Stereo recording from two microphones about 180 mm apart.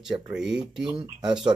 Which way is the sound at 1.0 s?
25° right (ahead or behind).